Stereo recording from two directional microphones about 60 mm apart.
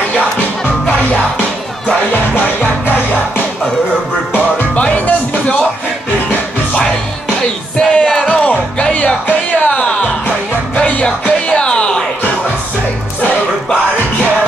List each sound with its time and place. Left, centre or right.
4.7 s music: left
7.8 s music: centre